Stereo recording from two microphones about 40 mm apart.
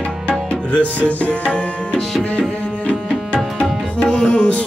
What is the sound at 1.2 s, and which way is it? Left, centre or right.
Tabla, left.